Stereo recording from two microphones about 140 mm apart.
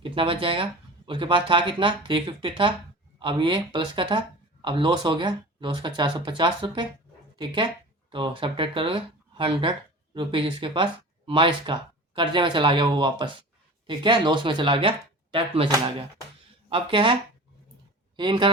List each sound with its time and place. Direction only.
0.0 s speech: 40° right (ahead or behind)
18.2 s speech: 35° right (ahead or behind)